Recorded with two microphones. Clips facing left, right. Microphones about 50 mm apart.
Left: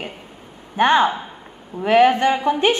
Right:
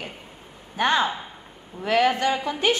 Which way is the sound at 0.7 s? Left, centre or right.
Left.